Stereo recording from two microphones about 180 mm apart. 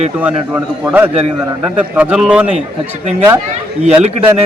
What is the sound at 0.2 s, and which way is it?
Speech, 10° right (ahead or behind).